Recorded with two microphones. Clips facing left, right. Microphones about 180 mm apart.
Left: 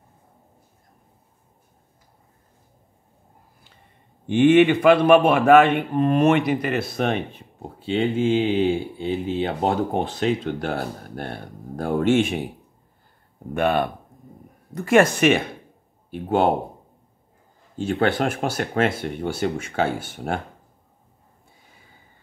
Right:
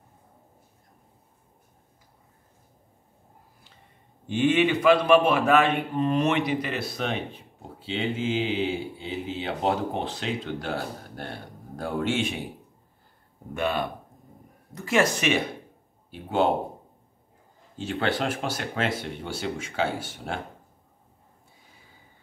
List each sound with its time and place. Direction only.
4.3 s a man's voice: 55° left (ahead or behind)
13.6 s a man's voice: 55° left (ahead or behind)
17.7 s a man's voice: 50° left (ahead or behind)